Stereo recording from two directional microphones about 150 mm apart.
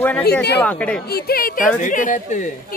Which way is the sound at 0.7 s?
10° left (ahead or behind).